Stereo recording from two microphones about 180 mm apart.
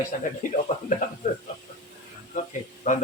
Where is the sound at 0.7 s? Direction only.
45° left (ahead or behind).